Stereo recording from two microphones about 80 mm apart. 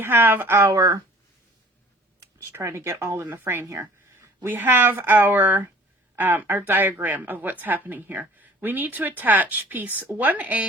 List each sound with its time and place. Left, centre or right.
0.0 s speech: right
0.7 s speech: right
2.5 s speech: right
3.2 s speech: right
4.4 s speech: right